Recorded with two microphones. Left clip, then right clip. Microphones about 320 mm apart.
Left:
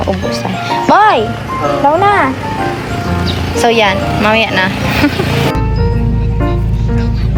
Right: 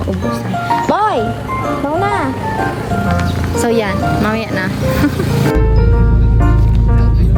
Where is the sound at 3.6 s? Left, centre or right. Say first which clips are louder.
Left 5 dB; centre.